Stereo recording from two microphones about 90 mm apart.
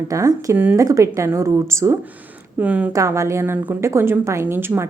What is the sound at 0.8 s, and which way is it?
A woman's voice, 35° right (ahead or behind).